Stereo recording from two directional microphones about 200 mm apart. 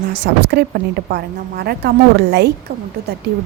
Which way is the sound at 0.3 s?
50° right (ahead or behind).